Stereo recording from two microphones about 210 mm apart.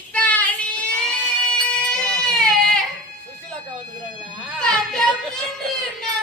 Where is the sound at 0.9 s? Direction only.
5° left (ahead or behind).